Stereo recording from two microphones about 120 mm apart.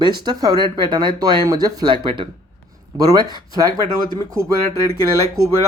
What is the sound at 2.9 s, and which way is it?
Speech, 35° right (ahead or behind).